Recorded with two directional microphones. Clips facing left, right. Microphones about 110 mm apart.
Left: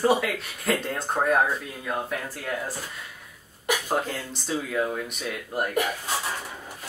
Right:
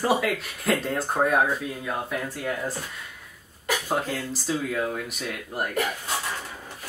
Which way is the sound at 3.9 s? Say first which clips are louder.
Even; centre (ahead or behind).